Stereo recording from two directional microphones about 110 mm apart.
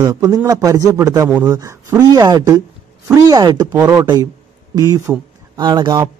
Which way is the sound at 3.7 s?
25° right (ahead or behind).